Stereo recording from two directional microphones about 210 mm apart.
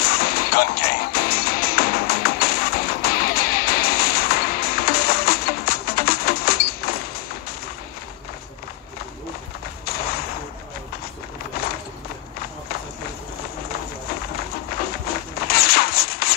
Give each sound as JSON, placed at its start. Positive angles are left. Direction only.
{"t": 0.0, "sound": "music", "side_deg": 45}
{"t": 9.8, "sound": "whip", "side_deg": 45}
{"t": 14.8, "sound": "a sound", "side_deg": 45}